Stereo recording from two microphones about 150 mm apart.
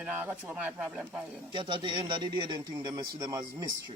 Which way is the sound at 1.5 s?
35° right (ahead or behind).